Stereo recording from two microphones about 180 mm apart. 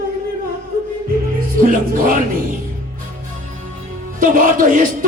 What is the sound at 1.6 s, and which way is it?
Music, 50° right (ahead or behind).